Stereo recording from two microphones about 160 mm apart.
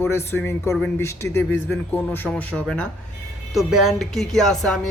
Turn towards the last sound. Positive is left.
turn(degrees=5)  # may be behind; listen again after turning